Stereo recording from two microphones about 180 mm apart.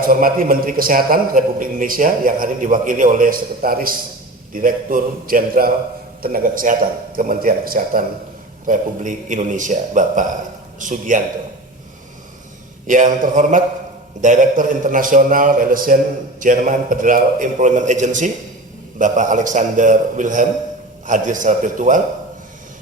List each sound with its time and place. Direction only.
0.0 s a man's voice: 50° right (ahead or behind)
12.9 s a man's voice: 45° right (ahead or behind)